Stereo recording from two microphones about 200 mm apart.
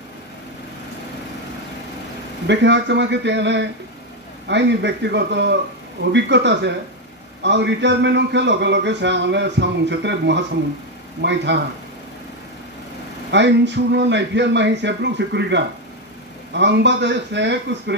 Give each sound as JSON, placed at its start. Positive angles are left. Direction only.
{"t": 2.4, "sound": "a man's voice", "side_deg": -60}
{"t": 13.3, "sound": "a man's voice", "side_deg": -60}